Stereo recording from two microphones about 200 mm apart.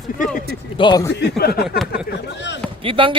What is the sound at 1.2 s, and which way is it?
Speech, 55° left (ahead or behind).